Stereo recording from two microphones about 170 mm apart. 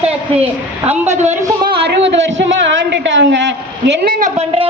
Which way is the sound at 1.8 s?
90° right.